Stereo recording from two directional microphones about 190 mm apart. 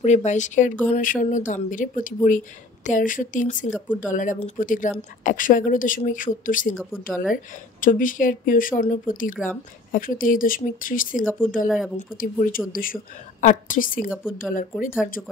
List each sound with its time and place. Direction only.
0.0 s speech: 40° left (ahead or behind)
7.8 s speech: 45° left (ahead or behind)
11.6 s speech: centre (ahead or behind)
12.2 s speech: 45° left (ahead or behind)
14.0 s speech: 5° right (ahead or behind)
14.5 s speech: 45° left (ahead or behind)